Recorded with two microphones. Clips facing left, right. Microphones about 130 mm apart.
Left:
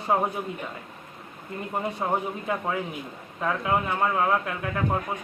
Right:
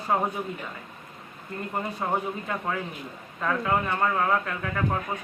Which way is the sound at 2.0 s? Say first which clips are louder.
Left 1 dB; 15° left (ahead or behind).